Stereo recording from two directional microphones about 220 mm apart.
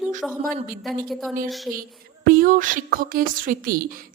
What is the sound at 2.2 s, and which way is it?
Speech, 40° right (ahead or behind).